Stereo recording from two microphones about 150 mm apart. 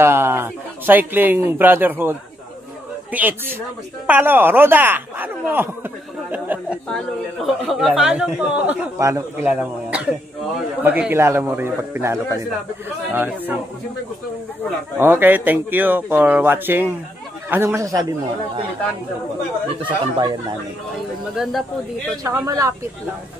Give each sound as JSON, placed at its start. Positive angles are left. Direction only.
{"t": 0.0, "sound": "a man's voice", "side_deg": -15}
{"t": 8.9, "sound": "speech", "side_deg": -20}
{"t": 9.5, "sound": "speech", "side_deg": -5}
{"t": 15.0, "sound": "speech", "side_deg": -15}
{"t": 19.8, "sound": "speech", "side_deg": -30}
{"t": 21.4, "sound": "speech", "side_deg": 0}
{"t": 22.2, "sound": "speech", "side_deg": -20}